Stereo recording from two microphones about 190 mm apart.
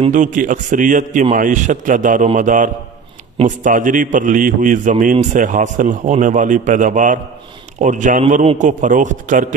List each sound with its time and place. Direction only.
0.1 s a man's voice: 45° right (ahead or behind)